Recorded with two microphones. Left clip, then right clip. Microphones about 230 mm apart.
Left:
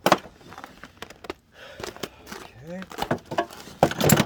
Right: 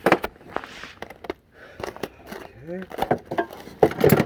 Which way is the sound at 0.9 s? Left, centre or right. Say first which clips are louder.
Right 2 dB; centre.